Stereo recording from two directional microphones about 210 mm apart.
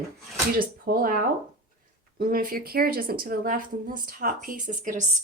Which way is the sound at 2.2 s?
40° right (ahead or behind).